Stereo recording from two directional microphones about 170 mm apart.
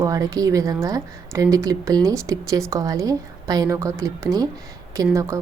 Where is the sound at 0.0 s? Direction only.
20° right (ahead or behind).